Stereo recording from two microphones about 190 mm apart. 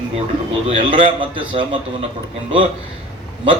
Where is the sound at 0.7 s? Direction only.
25° right (ahead or behind).